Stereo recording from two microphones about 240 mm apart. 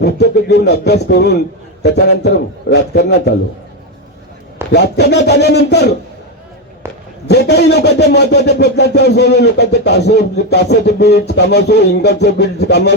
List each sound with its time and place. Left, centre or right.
0.0 s speech: left
4.7 s speech: left
6.8 s a sound: centre
7.3 s speech: left